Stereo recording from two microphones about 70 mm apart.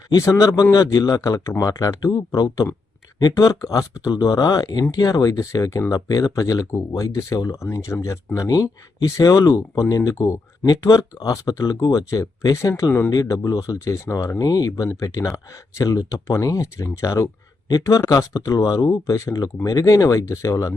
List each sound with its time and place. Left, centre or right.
0.1 s speech: left
0.9 s speech: left
4.1 s speech: left
5.9 s speech: left
10.7 s speech: left
12.7 s speech: left
13.1 s speech: left
13.7 s speech: left
18.6 s speech: left
18.9 s speech: left